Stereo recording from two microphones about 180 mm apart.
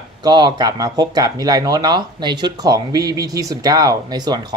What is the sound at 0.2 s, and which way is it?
Speech, 25° right (ahead or behind).